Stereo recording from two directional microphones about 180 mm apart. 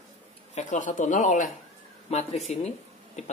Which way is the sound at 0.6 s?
45° left (ahead or behind).